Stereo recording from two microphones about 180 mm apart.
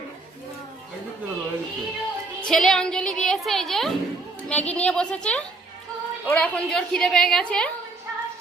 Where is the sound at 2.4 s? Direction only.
5° left (ahead or behind).